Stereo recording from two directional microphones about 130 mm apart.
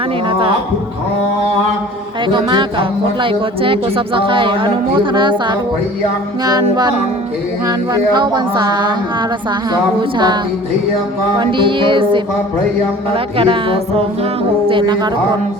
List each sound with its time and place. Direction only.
0.3 s speech: 45° right (ahead or behind)
2.2 s speech: 35° right (ahead or behind)
11.3 s speech: 40° right (ahead or behind)
13.1 s music: 45° right (ahead or behind)
14.7 s speech: 40° right (ahead or behind)